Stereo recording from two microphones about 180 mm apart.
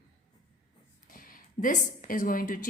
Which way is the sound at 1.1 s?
50° left (ahead or behind).